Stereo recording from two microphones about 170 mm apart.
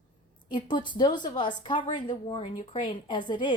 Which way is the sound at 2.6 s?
45° left (ahead or behind).